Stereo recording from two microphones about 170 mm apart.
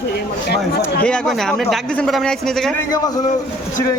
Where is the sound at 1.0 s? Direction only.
5° left (ahead or behind).